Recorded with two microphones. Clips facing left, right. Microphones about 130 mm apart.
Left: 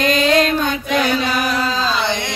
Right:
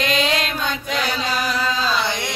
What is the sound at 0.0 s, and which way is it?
Mantra, 45° left (ahead or behind).